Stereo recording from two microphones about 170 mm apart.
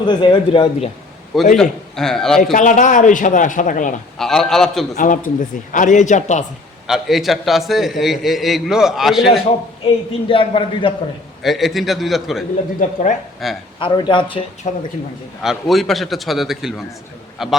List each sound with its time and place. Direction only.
0.0 s speech: 25° left (ahead or behind)
1.3 s a man's voice: centre (ahead or behind)
2.4 s a man's voice: 50° left (ahead or behind)
4.2 s a man's voice: centre (ahead or behind)
4.9 s a man's voice: 50° left (ahead or behind)
6.8 s a man's voice: centre (ahead or behind)
9.8 s a man's voice: 30° left (ahead or behind)
11.4 s a man's voice: centre (ahead or behind)
12.8 s a man's voice: 45° left (ahead or behind)
13.4 s a man's voice: centre (ahead or behind)
13.7 s speech: 30° left (ahead or behind)
14.6 s a man's voice: 40° left (ahead or behind)
15.4 s a man's voice: centre (ahead or behind)